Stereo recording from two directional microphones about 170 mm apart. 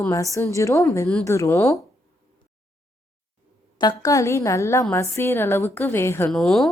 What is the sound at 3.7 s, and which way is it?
A woman's voice, 20° left (ahead or behind).